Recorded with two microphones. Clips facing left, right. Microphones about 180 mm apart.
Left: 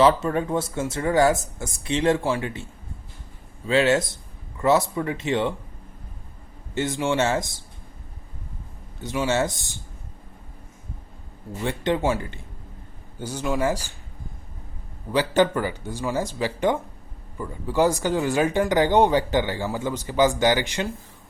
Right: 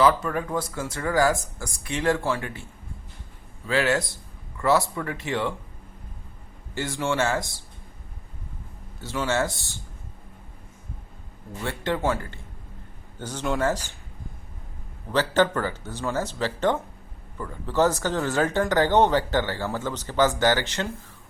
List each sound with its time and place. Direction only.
0.0 s speech: 25° left (ahead or behind)
3.7 s speech: 20° left (ahead or behind)
6.7 s speech: 20° left (ahead or behind)
9.0 s speech: 15° left (ahead or behind)
11.6 s speech: 20° left (ahead or behind)
15.1 s speech: 15° left (ahead or behind)